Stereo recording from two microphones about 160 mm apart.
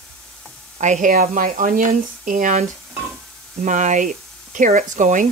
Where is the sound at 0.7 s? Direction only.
50° right (ahead or behind).